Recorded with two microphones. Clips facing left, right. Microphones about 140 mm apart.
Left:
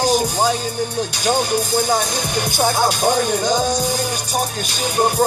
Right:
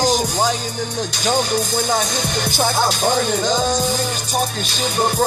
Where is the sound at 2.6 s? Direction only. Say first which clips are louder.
Left 1 dB; 50° left (ahead or behind).